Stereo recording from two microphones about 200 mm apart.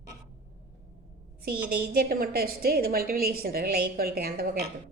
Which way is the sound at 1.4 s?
50° right (ahead or behind).